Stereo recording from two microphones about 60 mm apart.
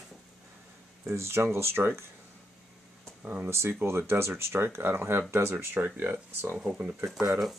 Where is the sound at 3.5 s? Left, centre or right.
Right.